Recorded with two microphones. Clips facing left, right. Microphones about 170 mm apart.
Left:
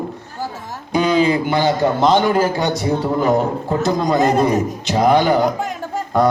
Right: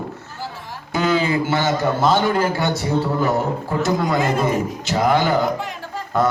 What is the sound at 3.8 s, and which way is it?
Speech, 20° left (ahead or behind).